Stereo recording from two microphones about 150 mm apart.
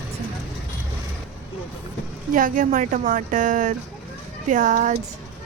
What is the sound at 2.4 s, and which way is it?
Speech, 60° right (ahead or behind).